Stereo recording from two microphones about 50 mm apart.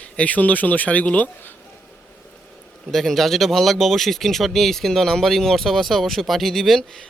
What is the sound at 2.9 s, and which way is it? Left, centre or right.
Speech, centre.